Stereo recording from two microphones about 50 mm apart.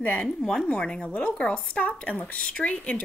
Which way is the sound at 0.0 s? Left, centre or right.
Left.